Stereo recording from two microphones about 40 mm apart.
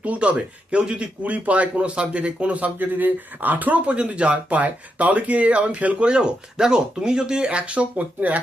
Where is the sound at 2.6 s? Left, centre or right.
Right.